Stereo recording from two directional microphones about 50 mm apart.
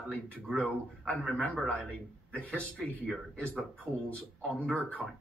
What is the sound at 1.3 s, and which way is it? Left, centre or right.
Speech, centre.